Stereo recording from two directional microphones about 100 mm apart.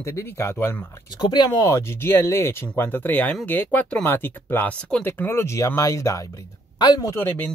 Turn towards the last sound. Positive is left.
turn(degrees=20)  # may be behind; listen again after turning